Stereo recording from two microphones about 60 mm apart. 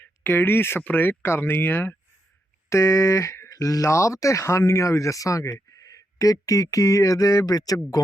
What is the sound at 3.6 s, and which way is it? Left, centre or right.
Speech, left.